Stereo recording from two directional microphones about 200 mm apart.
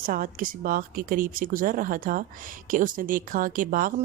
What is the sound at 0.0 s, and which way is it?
Speech, 45° right (ahead or behind).